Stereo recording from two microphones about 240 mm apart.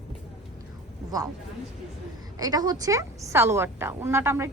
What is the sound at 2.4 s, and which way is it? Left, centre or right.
A woman's voice, centre.